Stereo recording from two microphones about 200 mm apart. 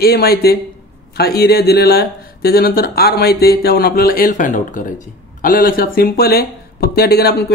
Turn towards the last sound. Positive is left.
turn(degrees=55)  # may be behind; listen again after turning